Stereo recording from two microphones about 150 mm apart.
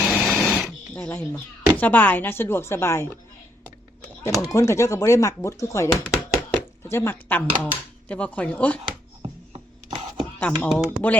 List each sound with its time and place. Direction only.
0.0 s printer: centre (ahead or behind)
0.9 s speech: 15° left (ahead or behind)
4.4 s speech: 20° left (ahead or behind)
8.8 s music: 40° right (ahead or behind)
10.4 s speech: 10° left (ahead or behind)